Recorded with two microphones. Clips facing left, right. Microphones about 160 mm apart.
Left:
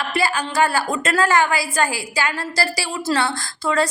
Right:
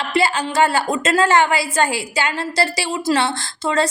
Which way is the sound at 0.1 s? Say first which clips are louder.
Right 5 dB; 25° right (ahead or behind).